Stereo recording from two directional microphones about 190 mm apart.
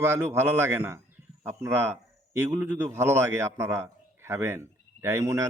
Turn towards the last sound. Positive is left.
turn(degrees=-15)  # may be behind; listen again after turning